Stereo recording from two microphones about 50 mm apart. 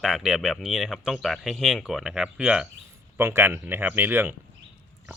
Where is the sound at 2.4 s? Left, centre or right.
Right.